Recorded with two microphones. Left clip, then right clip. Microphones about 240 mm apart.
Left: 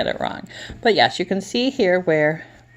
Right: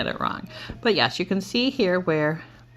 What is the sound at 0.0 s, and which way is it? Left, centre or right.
Speech, centre.